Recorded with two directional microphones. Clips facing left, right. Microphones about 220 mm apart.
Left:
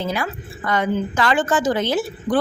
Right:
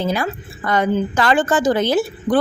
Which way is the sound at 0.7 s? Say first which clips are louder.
Right 3 dB; 40° right (ahead or behind).